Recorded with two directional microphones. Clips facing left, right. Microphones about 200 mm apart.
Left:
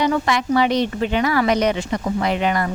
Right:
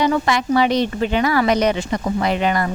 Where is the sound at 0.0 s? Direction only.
35° right (ahead or behind).